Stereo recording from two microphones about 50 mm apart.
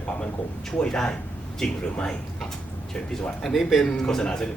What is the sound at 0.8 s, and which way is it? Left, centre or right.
Speech, centre.